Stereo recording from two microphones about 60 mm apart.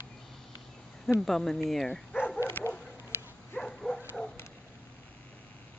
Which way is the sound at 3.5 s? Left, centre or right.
Centre.